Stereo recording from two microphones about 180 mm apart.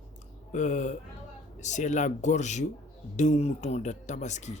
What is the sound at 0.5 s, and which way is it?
Speech, 40° left (ahead or behind).